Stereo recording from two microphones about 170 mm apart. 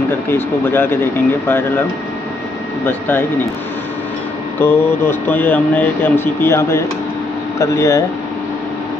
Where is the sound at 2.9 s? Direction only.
10° left (ahead or behind).